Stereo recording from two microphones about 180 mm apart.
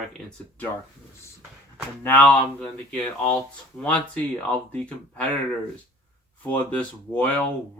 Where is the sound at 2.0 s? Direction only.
10° left (ahead or behind).